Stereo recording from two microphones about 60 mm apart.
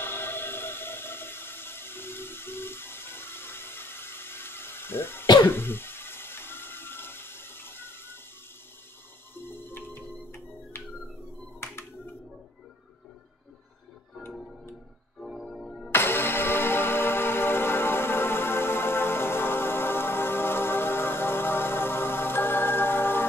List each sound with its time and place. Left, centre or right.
0.0 s a sound: left
9.3 s music: left
14.3 s tick-tock: centre
15.4 s music: centre
15.9 s music: left